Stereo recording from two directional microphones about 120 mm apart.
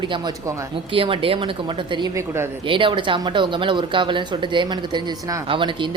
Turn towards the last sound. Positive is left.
turn(degrees=-45)  # may be behind; listen again after turning